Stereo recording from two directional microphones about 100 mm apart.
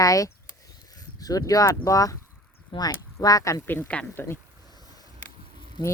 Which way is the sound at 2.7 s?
50° left (ahead or behind).